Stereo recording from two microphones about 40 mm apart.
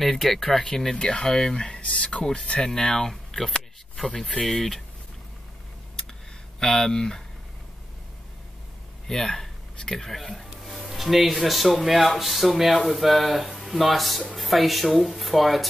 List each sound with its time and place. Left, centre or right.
0.0 s speech: centre
0.6 s speech: centre
1.8 s speech: left; by 4.8 s centre
6.6 s speech: centre
9.0 s speech: centre